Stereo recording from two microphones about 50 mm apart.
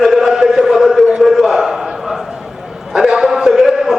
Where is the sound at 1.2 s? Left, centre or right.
Centre.